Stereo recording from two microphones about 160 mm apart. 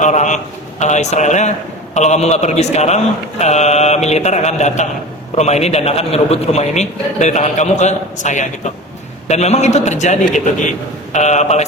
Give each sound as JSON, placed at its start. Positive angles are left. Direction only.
{"t": 0.0, "sound": "a man's voice", "side_deg": 50}